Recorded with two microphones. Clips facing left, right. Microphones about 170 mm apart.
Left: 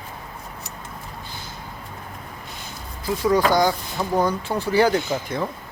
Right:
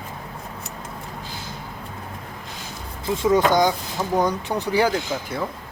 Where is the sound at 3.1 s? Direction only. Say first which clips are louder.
Right 1 dB; 20° right (ahead or behind); by 5.4 s 5° right (ahead or behind).